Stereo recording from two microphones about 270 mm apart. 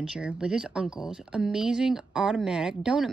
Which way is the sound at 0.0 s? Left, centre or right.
Centre.